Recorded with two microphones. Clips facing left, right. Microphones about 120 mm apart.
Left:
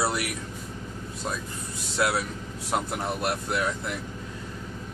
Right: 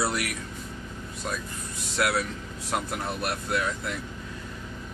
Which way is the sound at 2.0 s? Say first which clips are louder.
Even; 20° left (ahead or behind).